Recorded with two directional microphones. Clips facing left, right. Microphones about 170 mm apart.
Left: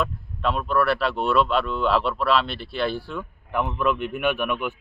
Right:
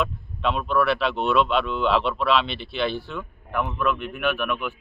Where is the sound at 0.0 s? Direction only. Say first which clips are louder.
Even; 5° left (ahead or behind).